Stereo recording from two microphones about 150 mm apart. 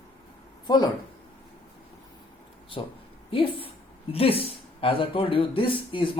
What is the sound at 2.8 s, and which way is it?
Speech, 35° left (ahead or behind).